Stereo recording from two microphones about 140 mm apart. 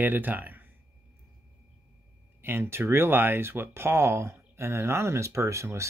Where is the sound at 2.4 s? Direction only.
15° right (ahead or behind).